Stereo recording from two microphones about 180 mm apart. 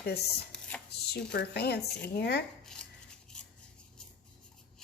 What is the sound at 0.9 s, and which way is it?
Speech, 65° left (ahead or behind).